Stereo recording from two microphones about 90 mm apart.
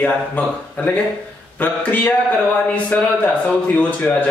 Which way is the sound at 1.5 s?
15° left (ahead or behind).